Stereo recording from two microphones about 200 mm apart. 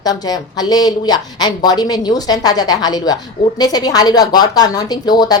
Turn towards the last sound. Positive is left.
turn(degrees=20)  # may be behind; listen again after turning